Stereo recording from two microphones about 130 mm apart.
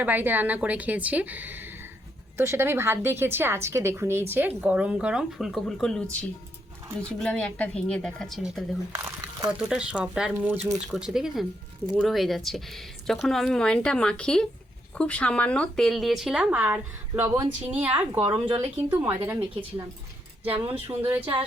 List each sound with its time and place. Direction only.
0.0 s a woman's voice: 15° right (ahead or behind)
8.9 s speech: 30° right (ahead or behind)
9.6 s a woman's voice: 5° right (ahead or behind)
17.2 s speech: 25° right (ahead or behind)
17.7 s a woman's voice: 10° right (ahead or behind)
18.3 s speech: 40° right (ahead or behind)
18.9 s a woman's voice: 15° right (ahead or behind)